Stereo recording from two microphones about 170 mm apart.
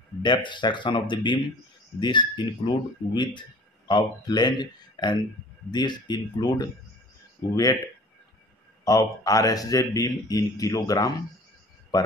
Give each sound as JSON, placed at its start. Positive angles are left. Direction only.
{"t": 0.2, "sound": "a man's voice", "side_deg": 25}
{"t": 8.8, "sound": "a man's voice", "side_deg": 20}